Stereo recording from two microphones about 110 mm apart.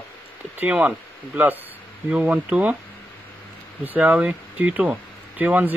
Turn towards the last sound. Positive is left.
turn(degrees=-15)  # may be behind; listen again after turning